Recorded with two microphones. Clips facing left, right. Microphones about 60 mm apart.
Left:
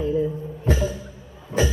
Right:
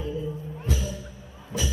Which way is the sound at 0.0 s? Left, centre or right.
Left.